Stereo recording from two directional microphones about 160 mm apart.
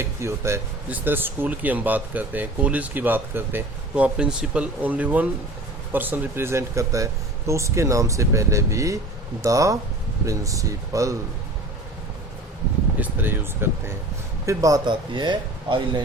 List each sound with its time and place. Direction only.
0.0 s speech: 15° right (ahead or behind)
13.0 s speech: 10° right (ahead or behind); by 16.0 s 30° right (ahead or behind)